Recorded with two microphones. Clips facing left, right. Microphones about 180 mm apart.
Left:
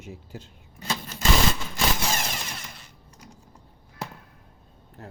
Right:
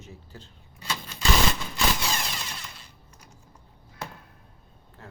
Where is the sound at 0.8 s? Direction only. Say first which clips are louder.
Left 3 dB; 45° left (ahead or behind).